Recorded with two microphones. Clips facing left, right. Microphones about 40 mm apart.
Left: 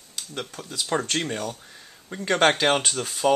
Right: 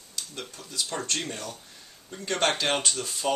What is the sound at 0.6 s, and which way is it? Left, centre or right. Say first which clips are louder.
Speech: left 6 dB; left.